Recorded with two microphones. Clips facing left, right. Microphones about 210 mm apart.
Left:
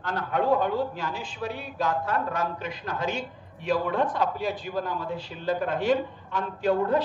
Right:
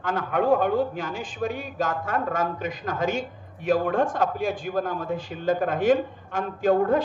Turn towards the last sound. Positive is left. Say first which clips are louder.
# right 3 dB
turn(degrees=-50)  # may be behind; listen again after turning